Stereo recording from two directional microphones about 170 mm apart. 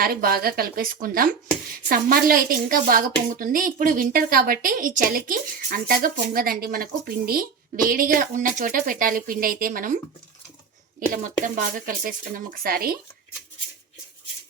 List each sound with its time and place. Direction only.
0.0 s a woman's voice: 60° right (ahead or behind)
11.1 s a woman's voice: 50° right (ahead or behind)